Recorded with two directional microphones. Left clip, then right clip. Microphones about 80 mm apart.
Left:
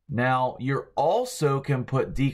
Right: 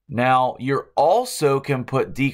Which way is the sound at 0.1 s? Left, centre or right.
Right.